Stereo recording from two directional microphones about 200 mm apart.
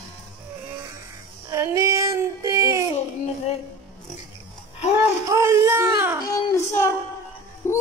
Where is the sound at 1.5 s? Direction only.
15° right (ahead or behind).